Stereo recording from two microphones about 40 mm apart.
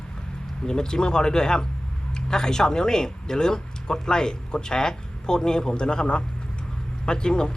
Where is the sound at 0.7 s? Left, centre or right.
Centre.